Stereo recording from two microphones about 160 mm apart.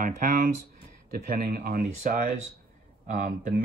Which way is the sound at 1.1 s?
65° right (ahead or behind).